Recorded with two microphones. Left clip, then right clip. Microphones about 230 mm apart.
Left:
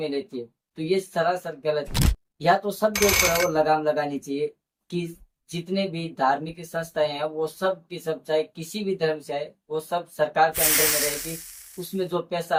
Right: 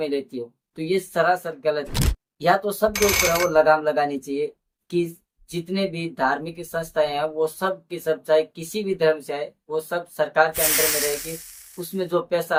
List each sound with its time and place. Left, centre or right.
0.1 s a woman's voice: centre